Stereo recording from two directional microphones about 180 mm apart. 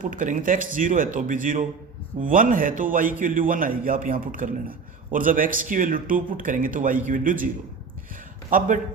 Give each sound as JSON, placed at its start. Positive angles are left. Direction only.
{"t": 0.0, "sound": "speech", "side_deg": -50}
{"t": 8.4, "sound": "speech", "side_deg": -45}